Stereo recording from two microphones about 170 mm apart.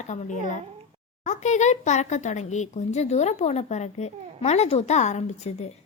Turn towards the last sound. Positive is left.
turn(degrees=40)  # may be behind; listen again after turning